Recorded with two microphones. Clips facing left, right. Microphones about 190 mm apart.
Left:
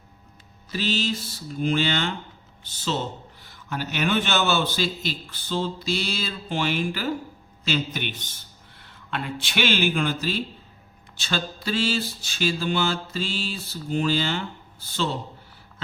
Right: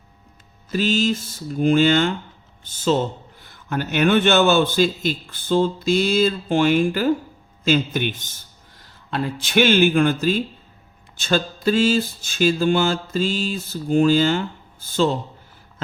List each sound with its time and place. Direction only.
0.7 s mantra: 45° right (ahead or behind)
8.8 s speech: 35° right (ahead or behind)
11.2 s mantra: 45° right (ahead or behind)